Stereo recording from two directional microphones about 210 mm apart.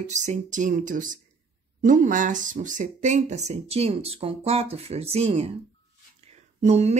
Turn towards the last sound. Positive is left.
turn(degrees=-30)  # may be behind; listen again after turning